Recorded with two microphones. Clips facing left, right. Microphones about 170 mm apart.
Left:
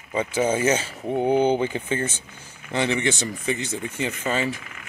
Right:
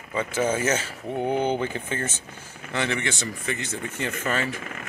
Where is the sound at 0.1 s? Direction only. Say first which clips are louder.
Left 2 dB; 15° left (ahead or behind).